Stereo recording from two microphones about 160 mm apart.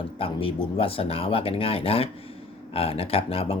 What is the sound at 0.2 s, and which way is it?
Speech, 35° left (ahead or behind).